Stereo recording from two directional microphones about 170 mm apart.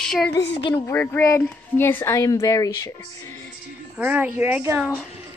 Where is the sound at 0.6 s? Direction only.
30° left (ahead or behind).